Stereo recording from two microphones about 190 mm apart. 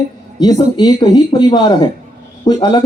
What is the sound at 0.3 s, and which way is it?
Speech, 20° left (ahead or behind).